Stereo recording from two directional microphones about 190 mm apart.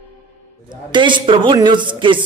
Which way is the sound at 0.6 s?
25° right (ahead or behind).